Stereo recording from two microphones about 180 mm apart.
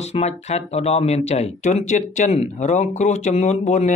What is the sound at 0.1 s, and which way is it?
Speech, 35° left (ahead or behind).